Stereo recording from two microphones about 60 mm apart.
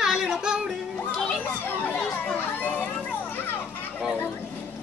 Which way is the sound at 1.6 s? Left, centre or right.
Left.